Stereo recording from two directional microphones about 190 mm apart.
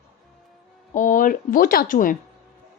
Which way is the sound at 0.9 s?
45° left (ahead or behind).